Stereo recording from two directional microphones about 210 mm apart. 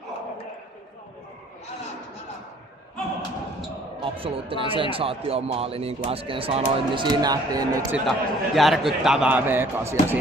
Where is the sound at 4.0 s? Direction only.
25° right (ahead or behind).